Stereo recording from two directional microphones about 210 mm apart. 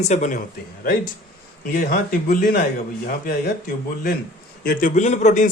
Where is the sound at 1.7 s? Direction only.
40° left (ahead or behind).